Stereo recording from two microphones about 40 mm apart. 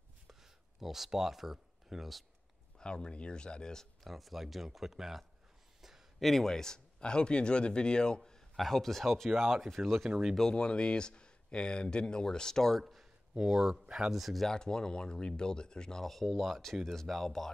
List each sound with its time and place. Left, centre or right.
0.3 s a sound: centre
2.8 s speech: left
4.0 s speech: centre
5.8 s a sound: centre
6.1 s speech: centre; by 8.2 s left
8.5 s speech: centre
10.5 s speech: left; by 13.0 s centre
13.3 s speech: centre
14.1 s speech: centre
14.5 s speech: centre
16.0 s speech: centre